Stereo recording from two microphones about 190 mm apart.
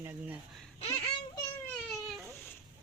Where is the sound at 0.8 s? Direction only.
30° left (ahead or behind).